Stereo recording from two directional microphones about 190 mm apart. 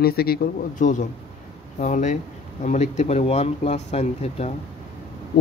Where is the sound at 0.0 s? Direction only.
55° left (ahead or behind); by 4.6 s 35° left (ahead or behind).